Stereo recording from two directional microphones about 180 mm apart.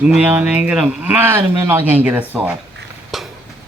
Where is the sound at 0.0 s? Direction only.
5° right (ahead or behind).